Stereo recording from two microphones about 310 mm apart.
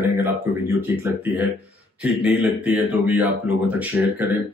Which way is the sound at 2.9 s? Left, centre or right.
Centre.